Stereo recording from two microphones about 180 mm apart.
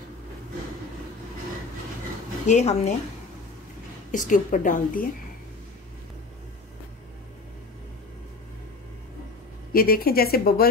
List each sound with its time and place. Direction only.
2.4 s speech: 40° left (ahead or behind)
4.1 s a woman's voice: 45° left (ahead or behind)
9.7 s a woman's voice: 55° left (ahead or behind)